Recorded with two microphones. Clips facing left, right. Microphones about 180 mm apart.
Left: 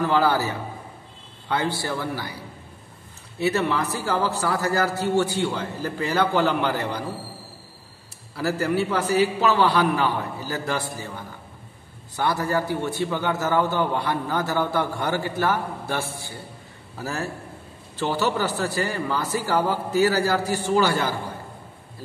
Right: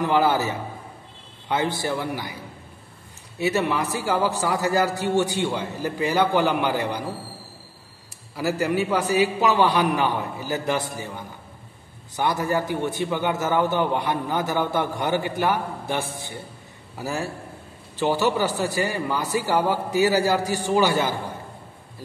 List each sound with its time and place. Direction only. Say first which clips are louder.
0.0 s a man's voice: right 1 dB; 20° right (ahead or behind)
3.3 s a man's voice: even; 15° right (ahead or behind)
8.4 s a man's voice: even; 15° right (ahead or behind)